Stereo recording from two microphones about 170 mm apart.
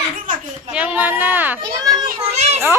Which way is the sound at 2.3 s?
40° right (ahead or behind).